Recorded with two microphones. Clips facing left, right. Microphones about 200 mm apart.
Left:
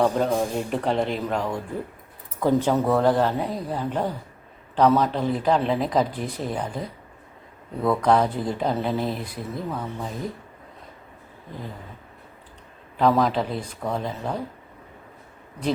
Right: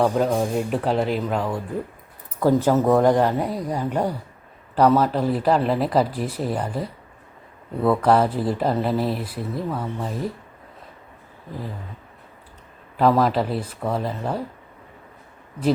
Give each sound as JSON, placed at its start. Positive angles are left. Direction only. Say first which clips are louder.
{"t": 0.0, "sound": "speech", "louder": "right 1 dB", "side_deg": 0}
{"t": 13.0, "sound": "speech", "louder": "right 2 dB", "side_deg": -5}